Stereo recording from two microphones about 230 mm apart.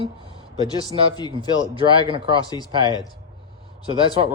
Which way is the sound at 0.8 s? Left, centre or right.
Centre.